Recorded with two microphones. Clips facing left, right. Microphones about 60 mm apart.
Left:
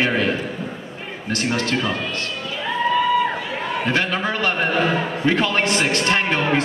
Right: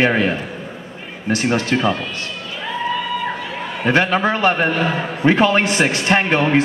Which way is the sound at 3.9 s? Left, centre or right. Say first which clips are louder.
Right 8 dB; right.